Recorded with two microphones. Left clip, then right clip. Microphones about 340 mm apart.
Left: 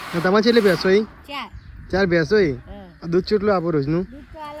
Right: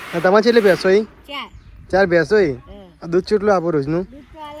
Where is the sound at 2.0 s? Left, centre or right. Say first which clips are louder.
Even; centre.